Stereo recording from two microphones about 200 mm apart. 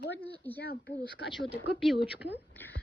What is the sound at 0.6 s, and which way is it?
Speech, 50° left (ahead or behind).